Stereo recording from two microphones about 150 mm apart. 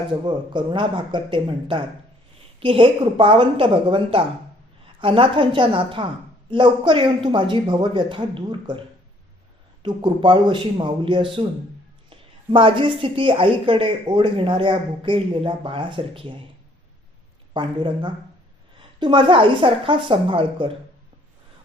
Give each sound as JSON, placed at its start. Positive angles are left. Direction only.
{"t": 0.3, "sound": "a woman's voice", "side_deg": -35}
{"t": 9.8, "sound": "a woman's voice", "side_deg": -30}
{"t": 17.5, "sound": "a woman's voice", "side_deg": -35}